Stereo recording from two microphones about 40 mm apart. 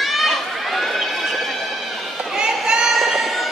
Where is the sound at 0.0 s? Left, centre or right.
Centre.